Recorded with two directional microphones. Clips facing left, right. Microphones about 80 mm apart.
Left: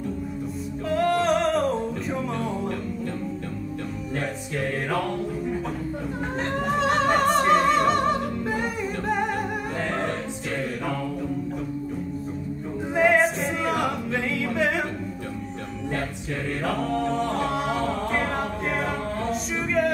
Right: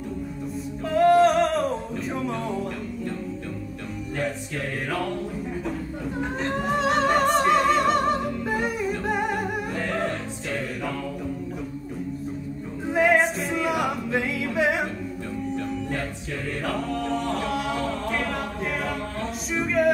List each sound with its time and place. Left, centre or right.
0.8 s singing: centre
6.5 s music: centre
12.9 s a capella: centre
13.7 s singing: centre
16.9 s singing: left
18.1 s a capella: left
19.5 s music: centre